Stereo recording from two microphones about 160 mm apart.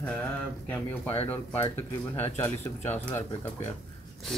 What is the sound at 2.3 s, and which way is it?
Speech, 15° left (ahead or behind).